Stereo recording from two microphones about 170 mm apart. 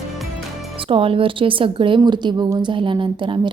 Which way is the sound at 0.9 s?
30° right (ahead or behind).